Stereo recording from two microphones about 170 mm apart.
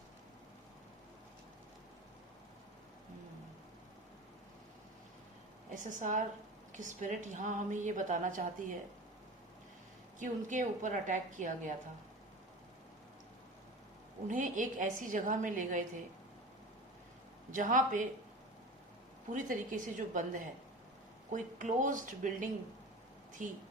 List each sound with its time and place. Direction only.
5.7 s a woman's voice: 50° right (ahead or behind)
10.2 s a woman's voice: 50° right (ahead or behind)
14.3 s a woman's voice: 50° right (ahead or behind)
17.5 s a woman's voice: 50° right (ahead or behind)
19.3 s a woman's voice: 50° right (ahead or behind)